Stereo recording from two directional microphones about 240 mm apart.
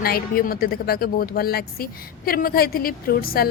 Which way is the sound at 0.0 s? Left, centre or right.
Left.